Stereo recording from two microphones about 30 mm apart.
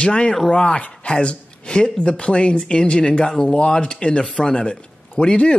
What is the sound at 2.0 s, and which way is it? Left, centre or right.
Speech, left.